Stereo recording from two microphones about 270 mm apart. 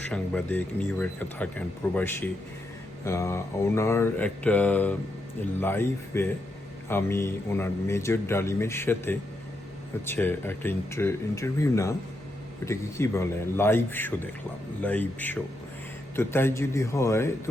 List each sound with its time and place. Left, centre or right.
0.0 s speech: centre